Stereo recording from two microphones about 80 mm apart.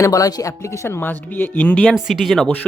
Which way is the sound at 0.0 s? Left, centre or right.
Left.